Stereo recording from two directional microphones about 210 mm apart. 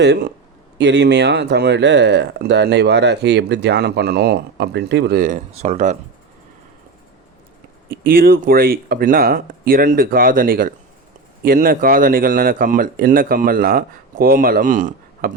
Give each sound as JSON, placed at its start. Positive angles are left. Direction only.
{"t": 0.0, "sound": "speech", "side_deg": -55}
{"t": 5.5, "sound": "speech", "side_deg": -35}
{"t": 7.9, "sound": "speech", "side_deg": -45}